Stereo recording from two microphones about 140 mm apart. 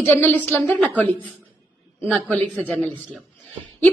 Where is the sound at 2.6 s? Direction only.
10° left (ahead or behind).